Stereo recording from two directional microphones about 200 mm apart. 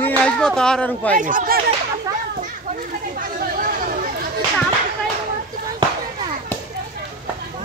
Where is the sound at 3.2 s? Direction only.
45° right (ahead or behind).